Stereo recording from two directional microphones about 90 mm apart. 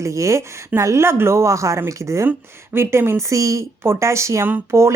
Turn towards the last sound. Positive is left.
turn(degrees=-30)  # may be behind; listen again after turning